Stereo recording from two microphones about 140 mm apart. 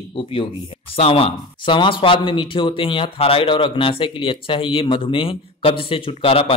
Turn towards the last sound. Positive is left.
turn(degrees=40)  # may be behind; listen again after turning